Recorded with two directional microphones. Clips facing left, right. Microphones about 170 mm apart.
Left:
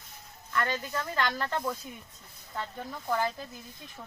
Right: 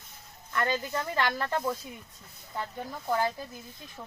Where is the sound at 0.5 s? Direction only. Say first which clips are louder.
Right 2 dB; 20° right (ahead or behind).